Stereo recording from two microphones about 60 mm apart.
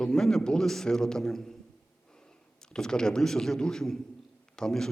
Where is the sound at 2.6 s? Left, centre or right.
Centre.